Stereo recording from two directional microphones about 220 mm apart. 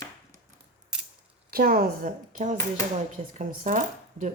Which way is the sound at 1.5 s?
40° right (ahead or behind).